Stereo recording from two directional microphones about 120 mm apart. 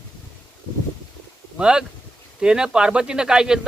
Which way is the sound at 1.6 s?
5° right (ahead or behind).